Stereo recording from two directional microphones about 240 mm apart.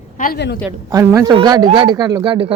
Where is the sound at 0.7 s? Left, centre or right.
Centre.